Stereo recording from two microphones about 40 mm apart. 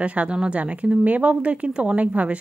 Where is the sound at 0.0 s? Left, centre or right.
Right.